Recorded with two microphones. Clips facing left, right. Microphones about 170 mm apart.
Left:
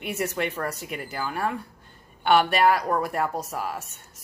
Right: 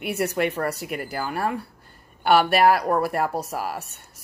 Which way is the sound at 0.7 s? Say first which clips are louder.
Right 4 dB; 5° right (ahead or behind).